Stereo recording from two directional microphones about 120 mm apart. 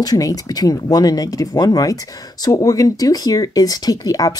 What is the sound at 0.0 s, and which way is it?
Speech, 30° left (ahead or behind).